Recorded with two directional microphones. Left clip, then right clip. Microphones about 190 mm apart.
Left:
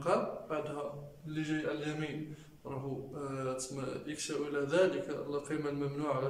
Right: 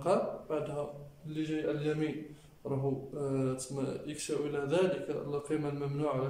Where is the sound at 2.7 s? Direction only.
25° right (ahead or behind).